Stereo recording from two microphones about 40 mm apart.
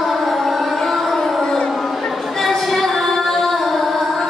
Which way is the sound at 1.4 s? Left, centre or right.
Centre.